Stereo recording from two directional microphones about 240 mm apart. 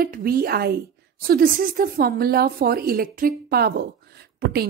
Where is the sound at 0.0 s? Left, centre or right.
Right.